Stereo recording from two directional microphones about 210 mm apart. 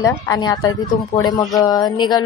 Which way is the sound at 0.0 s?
15° left (ahead or behind).